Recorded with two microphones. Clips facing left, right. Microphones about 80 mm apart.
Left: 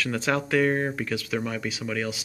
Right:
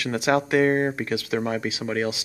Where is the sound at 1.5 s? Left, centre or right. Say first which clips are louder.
Right 4 dB; right.